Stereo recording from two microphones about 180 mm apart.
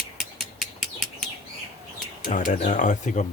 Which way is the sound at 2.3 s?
40° left (ahead or behind).